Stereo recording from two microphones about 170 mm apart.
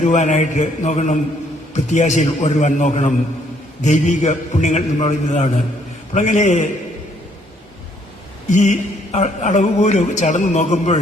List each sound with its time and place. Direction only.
0.0 s a man's voice: 45° left (ahead or behind)
8.4 s a man's voice: 45° left (ahead or behind)